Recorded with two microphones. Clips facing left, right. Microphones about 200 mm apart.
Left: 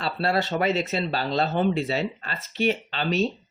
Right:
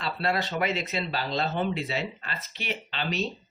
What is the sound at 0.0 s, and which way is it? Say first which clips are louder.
Speech: left 4 dB; 35° left (ahead or behind).